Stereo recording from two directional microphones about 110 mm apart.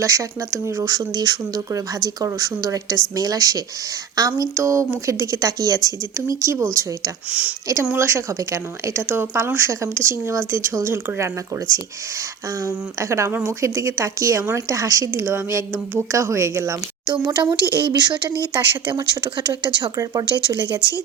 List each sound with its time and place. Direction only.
0.0 s speech: 30° right (ahead or behind)
7.3 s speech: 10° right (ahead or behind)
7.9 s speech: 25° right (ahead or behind)
17.1 s speech: 40° right (ahead or behind)